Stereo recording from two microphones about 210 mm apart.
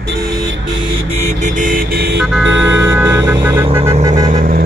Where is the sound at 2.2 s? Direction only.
5° right (ahead or behind).